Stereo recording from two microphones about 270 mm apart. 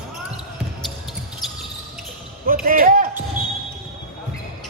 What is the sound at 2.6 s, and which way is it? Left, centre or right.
Basketball bounce, right.